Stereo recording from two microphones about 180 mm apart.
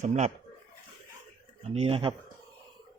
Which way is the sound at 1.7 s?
35° right (ahead or behind).